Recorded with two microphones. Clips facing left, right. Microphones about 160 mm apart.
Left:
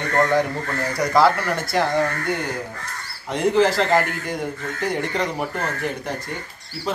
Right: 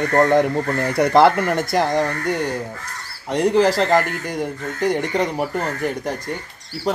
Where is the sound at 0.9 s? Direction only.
60° right (ahead or behind).